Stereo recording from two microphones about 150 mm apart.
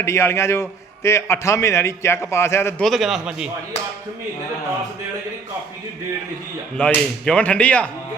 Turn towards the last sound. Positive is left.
turn(degrees=10)  # may be behind; listen again after turning